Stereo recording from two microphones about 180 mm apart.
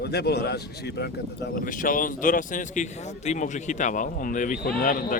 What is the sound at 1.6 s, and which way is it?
A man's voice, 50° left (ahead or behind).